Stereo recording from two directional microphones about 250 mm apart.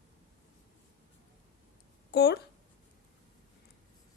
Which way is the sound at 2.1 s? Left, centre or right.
Left.